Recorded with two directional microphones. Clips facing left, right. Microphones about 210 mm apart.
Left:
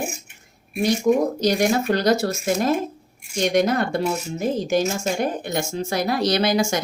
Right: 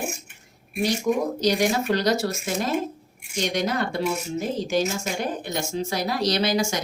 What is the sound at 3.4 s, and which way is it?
Speech, 50° left (ahead or behind).